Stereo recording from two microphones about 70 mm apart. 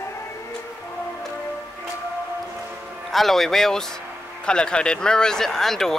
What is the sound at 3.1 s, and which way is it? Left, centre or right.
A man's voice, centre.